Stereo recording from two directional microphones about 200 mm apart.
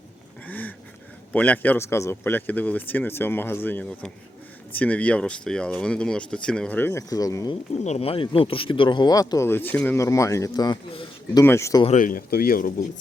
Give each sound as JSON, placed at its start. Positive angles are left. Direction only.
{"t": 0.4, "sound": "a sound", "side_deg": 10}
{"t": 1.3, "sound": "a man's voice", "side_deg": 10}
{"t": 7.9, "sound": "a man's voice", "side_deg": 30}
{"t": 11.9, "sound": "speech", "side_deg": 40}